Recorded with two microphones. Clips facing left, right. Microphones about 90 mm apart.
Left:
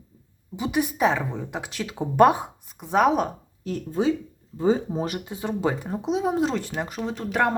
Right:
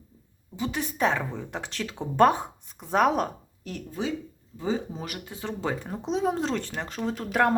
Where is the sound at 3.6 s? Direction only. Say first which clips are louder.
Left 7 dB; 35° left (ahead or behind).